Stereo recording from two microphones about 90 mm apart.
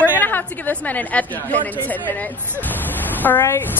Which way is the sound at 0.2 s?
20° left (ahead or behind).